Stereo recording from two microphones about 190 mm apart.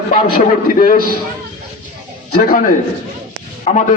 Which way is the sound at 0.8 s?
50° left (ahead or behind).